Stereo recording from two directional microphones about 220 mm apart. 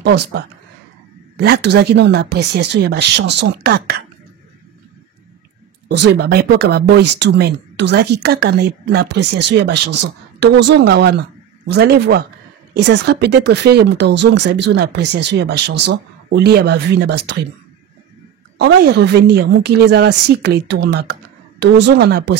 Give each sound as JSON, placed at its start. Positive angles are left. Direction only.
{"t": 0.0, "sound": "speech", "side_deg": -50}
{"t": 5.9, "sound": "speech", "side_deg": -50}
{"t": 18.6, "sound": "speech", "side_deg": -50}